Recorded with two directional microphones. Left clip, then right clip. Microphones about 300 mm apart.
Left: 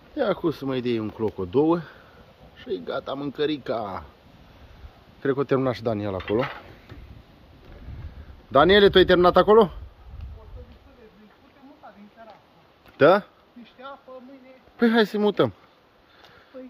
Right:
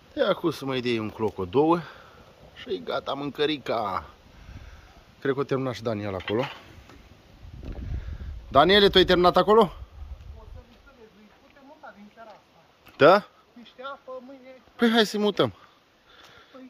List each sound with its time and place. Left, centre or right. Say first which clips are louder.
0.1 s speech: even; centre
5.2 s speech: left 4 dB; centre
8.5 s speech: left 2 dB; centre
12.9 s speech: even; centre
14.8 s speech: left 1 dB; centre